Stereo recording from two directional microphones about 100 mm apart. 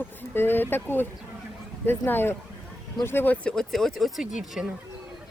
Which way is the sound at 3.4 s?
5° left (ahead or behind).